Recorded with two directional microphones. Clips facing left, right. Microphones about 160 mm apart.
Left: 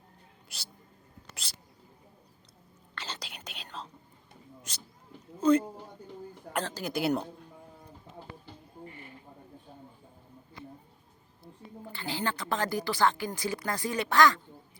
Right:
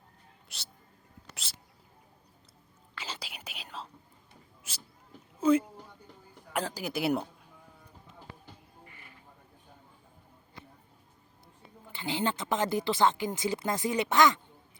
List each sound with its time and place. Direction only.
0.4 s speech: centre (ahead or behind)
1.3 s a sound: centre (ahead or behind)
2.9 s whispering: 5° right (ahead or behind)
4.7 s speech: 5° right (ahead or behind)
5.4 s a sound: 5° right (ahead or behind)
6.5 s speech: 10° right (ahead or behind)
11.9 s speech: 20° right (ahead or behind)